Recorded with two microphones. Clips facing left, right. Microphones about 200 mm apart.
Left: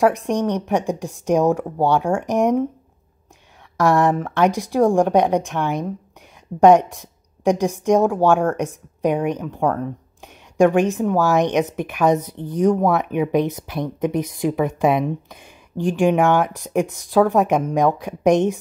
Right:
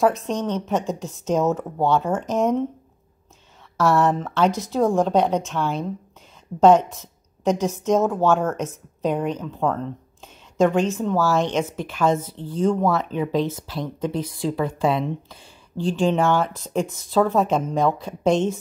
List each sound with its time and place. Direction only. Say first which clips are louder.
0.0 s speech: left 3 dB; 15° left (ahead or behind)
3.7 s speech: left 2 dB; 15° left (ahead or behind)